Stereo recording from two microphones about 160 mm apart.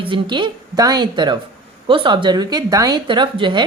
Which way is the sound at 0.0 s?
30° right (ahead or behind).